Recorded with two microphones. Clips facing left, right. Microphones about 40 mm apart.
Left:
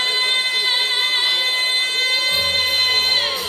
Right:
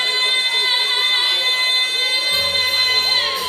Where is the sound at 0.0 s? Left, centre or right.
Centre.